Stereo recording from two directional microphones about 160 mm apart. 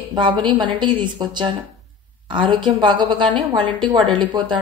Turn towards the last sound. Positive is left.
turn(degrees=-30)  # may be behind; listen again after turning